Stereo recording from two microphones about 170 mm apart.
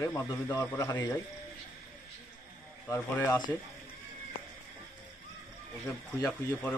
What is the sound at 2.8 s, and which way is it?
Speech, 15° left (ahead or behind).